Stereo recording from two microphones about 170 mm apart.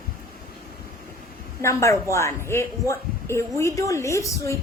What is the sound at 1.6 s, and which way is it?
A woman's voice, 15° left (ahead or behind).